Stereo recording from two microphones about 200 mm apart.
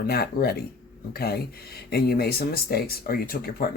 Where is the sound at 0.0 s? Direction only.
50° left (ahead or behind).